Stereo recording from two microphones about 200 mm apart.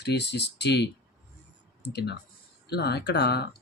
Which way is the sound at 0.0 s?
55° left (ahead or behind).